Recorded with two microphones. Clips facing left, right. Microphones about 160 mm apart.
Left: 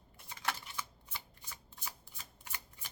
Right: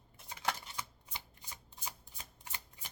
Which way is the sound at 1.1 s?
20° right (ahead or behind).